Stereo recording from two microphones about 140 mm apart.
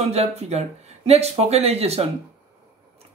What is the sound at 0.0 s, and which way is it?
Speech, 50° right (ahead or behind).